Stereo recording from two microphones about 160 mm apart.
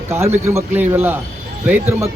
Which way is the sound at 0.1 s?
15° right (ahead or behind).